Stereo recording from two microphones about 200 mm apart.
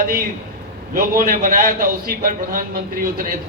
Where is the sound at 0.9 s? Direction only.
45° right (ahead or behind).